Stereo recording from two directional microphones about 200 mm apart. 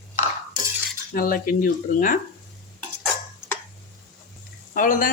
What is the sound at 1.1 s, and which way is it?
Speech, 45° left (ahead or behind).